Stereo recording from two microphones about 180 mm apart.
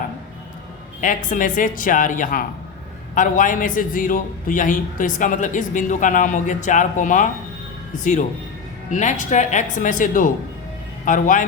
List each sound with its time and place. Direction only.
1.0 s a man's voice: 50° left (ahead or behind)
8.9 s a man's voice: 45° left (ahead or behind)